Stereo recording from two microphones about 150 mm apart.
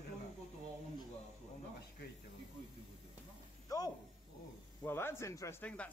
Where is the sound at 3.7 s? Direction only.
25° left (ahead or behind).